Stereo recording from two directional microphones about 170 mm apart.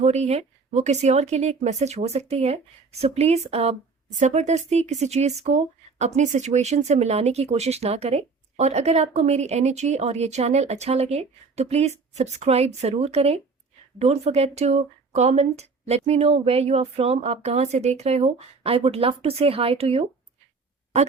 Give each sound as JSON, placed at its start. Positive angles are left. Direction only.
{"t": 0.0, "sound": "speech", "side_deg": -40}